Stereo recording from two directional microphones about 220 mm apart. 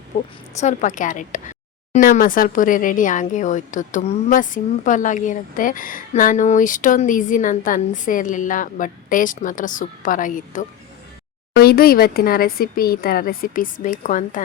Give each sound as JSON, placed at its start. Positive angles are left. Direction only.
{"t": 0.1, "sound": "speech", "side_deg": 30}